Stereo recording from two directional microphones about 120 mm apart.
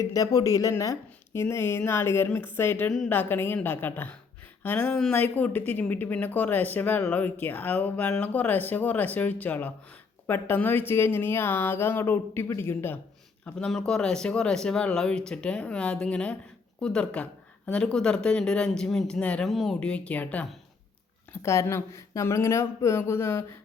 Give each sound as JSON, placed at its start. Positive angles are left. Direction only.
{"t": 0.0, "sound": "speech", "side_deg": 30}
{"t": 13.4, "sound": "speech", "side_deg": 5}
{"t": 21.3, "sound": "speech", "side_deg": 25}